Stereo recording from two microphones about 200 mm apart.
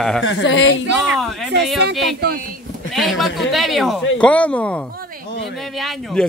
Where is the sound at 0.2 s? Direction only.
65° left (ahead or behind).